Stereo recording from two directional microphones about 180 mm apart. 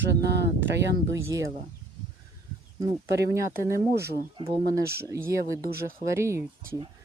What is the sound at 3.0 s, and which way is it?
Speech, 75° right (ahead or behind).